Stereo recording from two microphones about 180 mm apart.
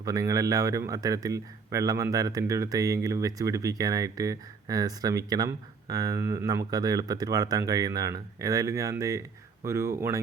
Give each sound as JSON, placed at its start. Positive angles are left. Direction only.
{"t": 0.0, "sound": "speech", "side_deg": -20}